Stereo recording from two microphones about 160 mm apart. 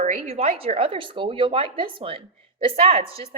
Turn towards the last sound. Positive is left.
turn(degrees=-35)  # may be behind; listen again after turning